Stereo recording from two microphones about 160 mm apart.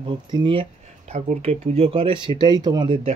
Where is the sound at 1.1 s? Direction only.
45° right (ahead or behind).